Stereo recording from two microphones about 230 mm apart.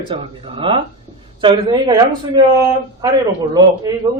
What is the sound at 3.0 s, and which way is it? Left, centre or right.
Speech, centre.